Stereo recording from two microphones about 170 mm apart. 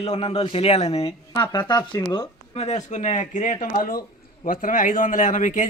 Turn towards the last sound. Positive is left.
turn(degrees=50)  # may be behind; listen again after turning